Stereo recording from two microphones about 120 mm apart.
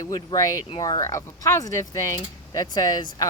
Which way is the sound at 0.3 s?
30° left (ahead or behind).